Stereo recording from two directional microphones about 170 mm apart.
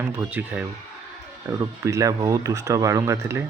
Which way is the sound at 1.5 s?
20° right (ahead or behind).